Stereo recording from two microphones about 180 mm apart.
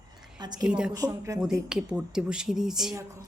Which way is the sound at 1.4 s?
5° right (ahead or behind).